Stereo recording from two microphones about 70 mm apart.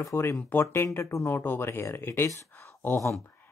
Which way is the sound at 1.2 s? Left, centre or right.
Left.